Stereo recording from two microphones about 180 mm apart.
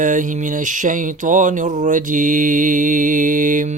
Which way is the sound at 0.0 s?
45° right (ahead or behind).